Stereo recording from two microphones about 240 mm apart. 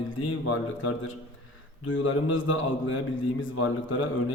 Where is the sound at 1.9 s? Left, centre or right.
Left.